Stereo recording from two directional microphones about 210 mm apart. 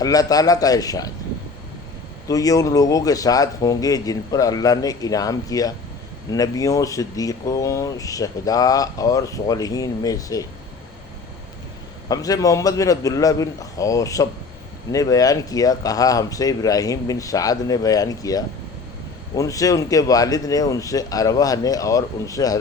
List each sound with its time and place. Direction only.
0.0 s speech: 15° left (ahead or behind)
2.2 s speech: 15° left (ahead or behind)
12.0 s speech: 15° left (ahead or behind)